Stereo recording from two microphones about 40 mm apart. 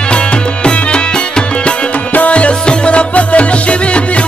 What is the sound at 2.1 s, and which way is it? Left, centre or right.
Music, left.